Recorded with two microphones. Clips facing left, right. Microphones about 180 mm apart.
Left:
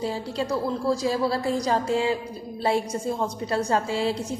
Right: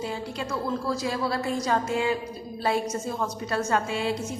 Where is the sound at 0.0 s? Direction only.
35° left (ahead or behind).